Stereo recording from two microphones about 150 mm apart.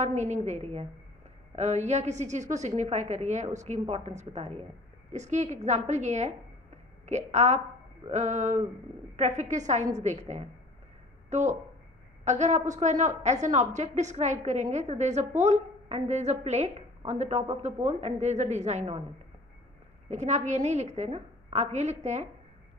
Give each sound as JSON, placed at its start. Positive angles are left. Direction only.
{"t": 0.0, "sound": "a woman's voice", "side_deg": -50}
{"t": 20.1, "sound": "a woman's voice", "side_deg": -50}